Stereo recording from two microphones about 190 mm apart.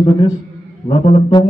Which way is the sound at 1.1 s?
25° left (ahead or behind).